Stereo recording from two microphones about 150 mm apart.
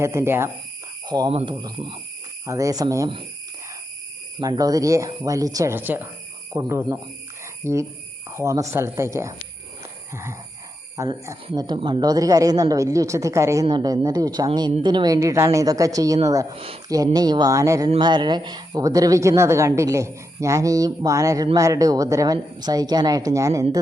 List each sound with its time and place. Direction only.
0.0 s speech: 20° right (ahead or behind)
1.0 s speech: 25° right (ahead or behind)
1.3 s speech: 40° right (ahead or behind)
2.5 s a woman's voice: 20° right (ahead or behind)
4.4 s a woman's voice: 25° right (ahead or behind)
10.9 s a woman's voice: 20° right (ahead or behind)